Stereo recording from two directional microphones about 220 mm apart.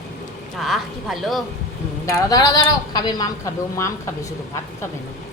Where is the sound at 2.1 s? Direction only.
15° left (ahead or behind).